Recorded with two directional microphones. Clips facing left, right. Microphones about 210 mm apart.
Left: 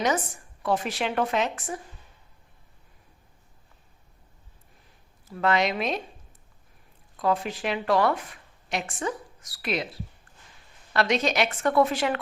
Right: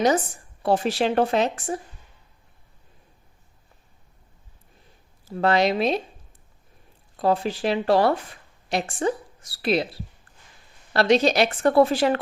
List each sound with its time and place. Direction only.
0.6 s speech: 30° right (ahead or behind)
5.3 s speech: 35° right (ahead or behind)
7.2 s speech: 30° right (ahead or behind)